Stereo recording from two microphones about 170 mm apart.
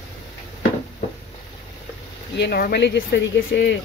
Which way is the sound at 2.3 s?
70° left (ahead or behind).